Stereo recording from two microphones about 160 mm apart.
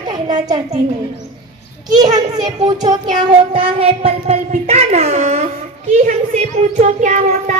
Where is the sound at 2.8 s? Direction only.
25° right (ahead or behind); by 5.5 s 40° right (ahead or behind).